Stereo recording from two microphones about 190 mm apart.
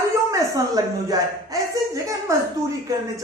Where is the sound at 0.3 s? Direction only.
15° right (ahead or behind).